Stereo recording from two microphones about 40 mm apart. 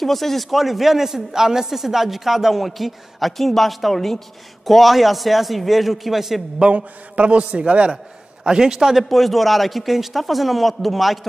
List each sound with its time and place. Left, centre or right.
0.0 s a man's voice: centre
6.6 s a man's voice: right
8.5 s a man's voice: centre
9.1 s a man's voice: centre